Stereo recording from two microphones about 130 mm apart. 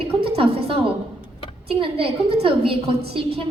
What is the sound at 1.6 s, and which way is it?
A woman's voice, 45° right (ahead or behind).